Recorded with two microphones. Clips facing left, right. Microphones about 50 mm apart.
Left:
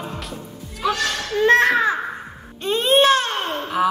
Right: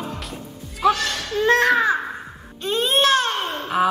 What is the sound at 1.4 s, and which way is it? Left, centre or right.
Speech, left.